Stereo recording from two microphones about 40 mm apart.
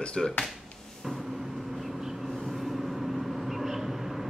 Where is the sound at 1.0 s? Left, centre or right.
Centre.